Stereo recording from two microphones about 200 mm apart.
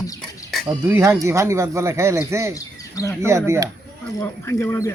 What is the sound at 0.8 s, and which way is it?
A man's voice, 10° right (ahead or behind).